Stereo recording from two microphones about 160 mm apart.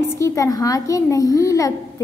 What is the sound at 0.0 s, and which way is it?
A child's voice, 20° left (ahead or behind).